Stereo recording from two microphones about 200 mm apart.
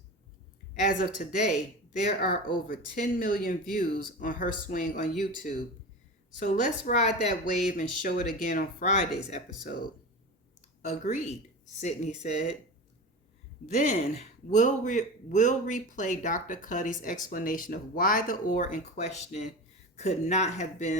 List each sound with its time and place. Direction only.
0.7 s a man's voice: 40° left (ahead or behind)
10.8 s a man's voice: 35° left (ahead or behind)
13.7 s a man's voice: 35° left (ahead or behind)